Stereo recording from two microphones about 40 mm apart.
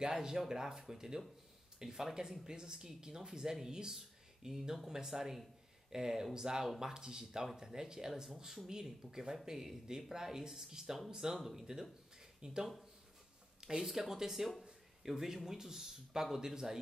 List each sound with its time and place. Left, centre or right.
0.0 s speech: centre